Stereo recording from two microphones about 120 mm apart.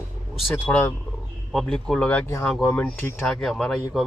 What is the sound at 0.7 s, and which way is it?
Speech, 15° left (ahead or behind).